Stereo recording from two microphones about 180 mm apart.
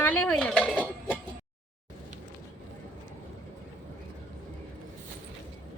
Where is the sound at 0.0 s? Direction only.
10° left (ahead or behind).